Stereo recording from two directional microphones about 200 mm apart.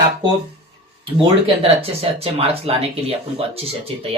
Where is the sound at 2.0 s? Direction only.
30° right (ahead or behind).